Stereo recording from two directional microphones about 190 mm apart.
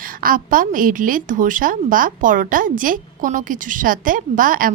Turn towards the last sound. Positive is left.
turn(degrees=-45)  # may be behind; listen again after turning